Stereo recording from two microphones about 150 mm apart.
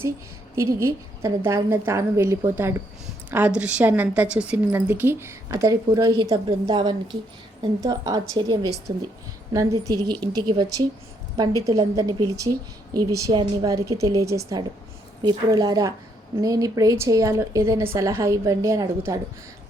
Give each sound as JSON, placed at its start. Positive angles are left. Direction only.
{"t": 0.5, "sound": "a woman's voice", "side_deg": -20}